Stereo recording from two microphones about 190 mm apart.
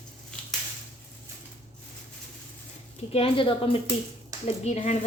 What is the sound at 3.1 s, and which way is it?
A woman's voice, 30° left (ahead or behind).